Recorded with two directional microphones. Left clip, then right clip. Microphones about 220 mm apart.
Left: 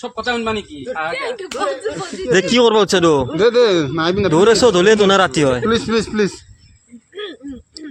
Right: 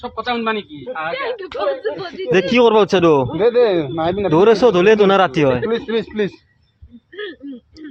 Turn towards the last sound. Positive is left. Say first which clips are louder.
# left 2 dB
turn(degrees=60)  # may be behind; listen again after turning